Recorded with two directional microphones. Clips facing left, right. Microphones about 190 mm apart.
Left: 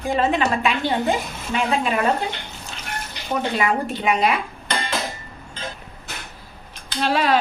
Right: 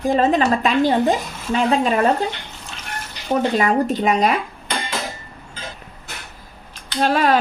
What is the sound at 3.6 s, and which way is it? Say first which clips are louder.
Speech: right 4 dB; 40° right (ahead or behind).